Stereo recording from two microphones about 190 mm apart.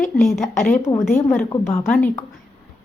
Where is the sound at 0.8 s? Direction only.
15° left (ahead or behind).